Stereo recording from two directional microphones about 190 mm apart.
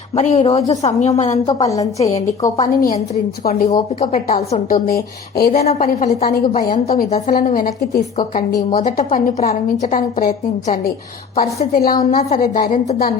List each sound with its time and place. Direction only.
0.1 s speech: 35° left (ahead or behind)
1.5 s a woman's voice: 20° left (ahead or behind)
3.5 s speech: 35° left (ahead or behind)
4.3 s a woman's voice: 45° left (ahead or behind)
5.6 s a woman's voice: 40° left (ahead or behind)
8.7 s a woman's voice: 45° left (ahead or behind)